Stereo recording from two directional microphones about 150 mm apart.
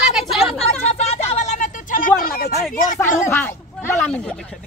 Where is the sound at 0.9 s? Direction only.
45° left (ahead or behind); by 2.5 s 75° left (ahead or behind).